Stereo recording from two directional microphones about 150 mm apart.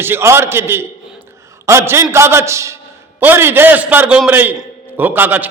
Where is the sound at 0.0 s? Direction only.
15° right (ahead or behind).